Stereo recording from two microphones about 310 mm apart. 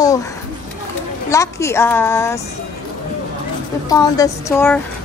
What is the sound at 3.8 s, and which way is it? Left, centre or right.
Speech, centre.